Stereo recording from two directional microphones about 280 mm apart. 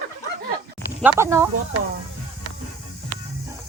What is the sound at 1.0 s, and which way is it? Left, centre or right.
Speech, centre.